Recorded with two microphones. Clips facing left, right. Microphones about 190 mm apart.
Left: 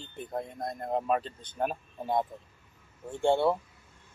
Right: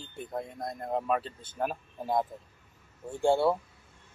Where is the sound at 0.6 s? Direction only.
20° left (ahead or behind).